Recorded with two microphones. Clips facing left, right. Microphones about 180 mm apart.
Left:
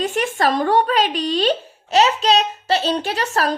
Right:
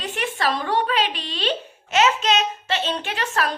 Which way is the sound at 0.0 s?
45° left (ahead or behind).